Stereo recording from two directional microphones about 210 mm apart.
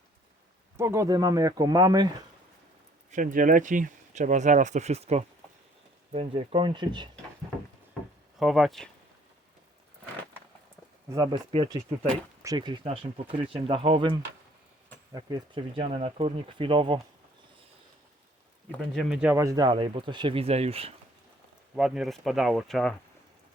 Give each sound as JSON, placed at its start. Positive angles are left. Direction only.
{"t": 0.8, "sound": "speech", "side_deg": -15}
{"t": 3.1, "sound": "speech", "side_deg": -40}
{"t": 8.4, "sound": "speech", "side_deg": 0}
{"t": 11.1, "sound": "speech", "side_deg": -20}
{"t": 18.7, "sound": "speech", "side_deg": 0}
{"t": 19.4, "sound": "speech", "side_deg": -15}
{"t": 21.8, "sound": "speech", "side_deg": 0}